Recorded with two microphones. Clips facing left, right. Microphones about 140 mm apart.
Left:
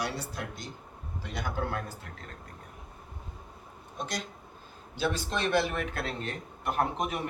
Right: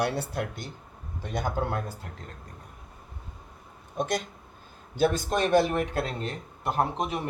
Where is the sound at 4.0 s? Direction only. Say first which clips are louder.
Right 8 dB; 50° right (ahead or behind); by 7.3 s 30° right (ahead or behind).